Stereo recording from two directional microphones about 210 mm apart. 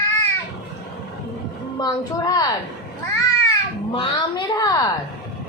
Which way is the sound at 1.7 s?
20° left (ahead or behind).